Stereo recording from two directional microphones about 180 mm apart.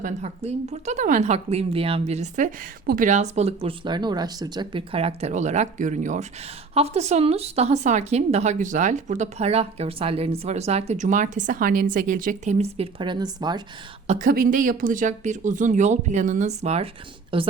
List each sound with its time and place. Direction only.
0.0 s a woman's voice: 40° right (ahead or behind)
14.1 s speech: 50° right (ahead or behind); by 17.5 s 30° right (ahead or behind)